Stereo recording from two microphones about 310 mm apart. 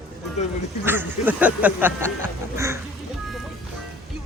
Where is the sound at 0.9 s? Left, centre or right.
Centre.